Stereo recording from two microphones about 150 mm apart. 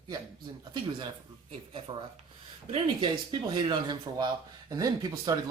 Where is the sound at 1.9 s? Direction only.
30° right (ahead or behind).